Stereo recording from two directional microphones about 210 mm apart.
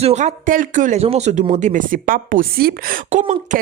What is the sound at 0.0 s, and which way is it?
Speech, 30° right (ahead or behind).